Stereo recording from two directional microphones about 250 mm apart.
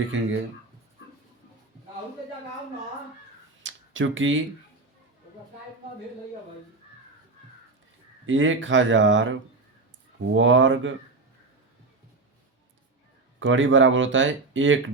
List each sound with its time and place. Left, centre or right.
0.1 s speech: right
3.6 s a sound: right
8.3 s speech: right
13.4 s speech: right